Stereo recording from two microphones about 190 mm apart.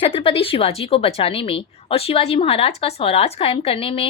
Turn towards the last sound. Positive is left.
turn(degrees=30)  # may be behind; listen again after turning